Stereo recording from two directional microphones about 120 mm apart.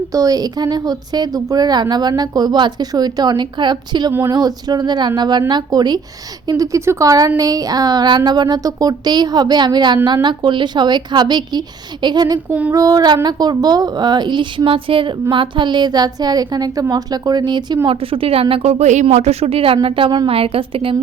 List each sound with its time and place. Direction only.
0.1 s speech: 30° right (ahead or behind)
12.5 s female singing: 15° right (ahead or behind)
12.7 s speech: 30° right (ahead or behind)
17.8 s speech: 50° right (ahead or behind); by 19.0 s 75° right (ahead or behind)
19.0 s speech: 60° right (ahead or behind)